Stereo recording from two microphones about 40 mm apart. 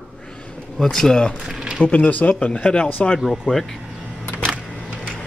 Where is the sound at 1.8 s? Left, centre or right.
Left.